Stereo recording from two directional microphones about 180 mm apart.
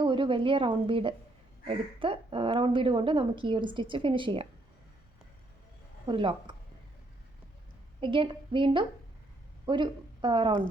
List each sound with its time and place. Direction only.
0.0 s a woman's voice: 25° right (ahead or behind)
6.1 s a woman's voice: 25° right (ahead or behind)
8.0 s a woman's voice: 30° right (ahead or behind)